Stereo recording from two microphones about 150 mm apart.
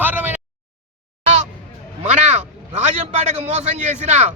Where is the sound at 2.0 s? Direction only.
45° right (ahead or behind).